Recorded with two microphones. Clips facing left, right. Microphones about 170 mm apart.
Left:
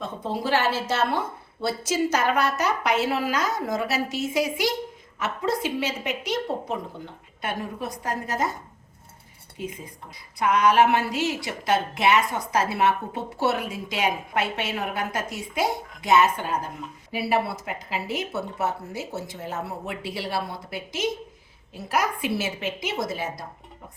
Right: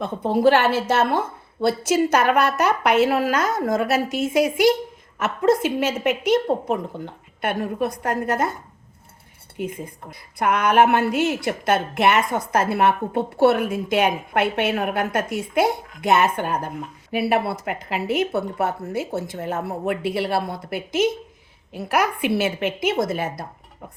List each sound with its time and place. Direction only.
0.0 s a woman's voice: 60° right (ahead or behind)
9.6 s a woman's voice: 55° right (ahead or behind)